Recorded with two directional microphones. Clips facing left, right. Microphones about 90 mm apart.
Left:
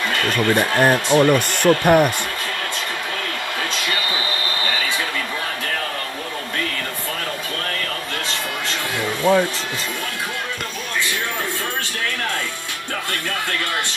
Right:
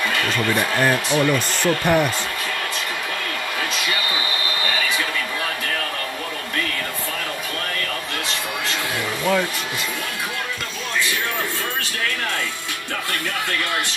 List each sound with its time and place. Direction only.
0.6 s speech: 35° left (ahead or behind)
1.5 s speech: 55° left (ahead or behind)
9.3 s speech: 30° left (ahead or behind)